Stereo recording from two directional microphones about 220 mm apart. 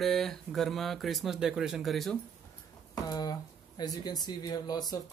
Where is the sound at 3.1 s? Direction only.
20° left (ahead or behind).